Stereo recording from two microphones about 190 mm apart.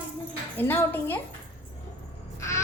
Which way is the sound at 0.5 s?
10° left (ahead or behind).